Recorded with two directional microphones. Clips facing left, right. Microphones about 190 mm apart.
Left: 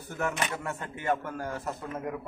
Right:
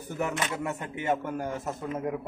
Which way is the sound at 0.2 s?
20° right (ahead or behind).